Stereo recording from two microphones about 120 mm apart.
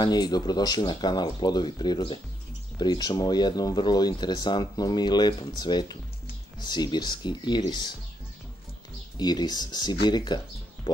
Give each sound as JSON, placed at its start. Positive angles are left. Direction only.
{"t": 0.0, "sound": "speech", "side_deg": 35}
{"t": 9.1, "sound": "speech", "side_deg": 35}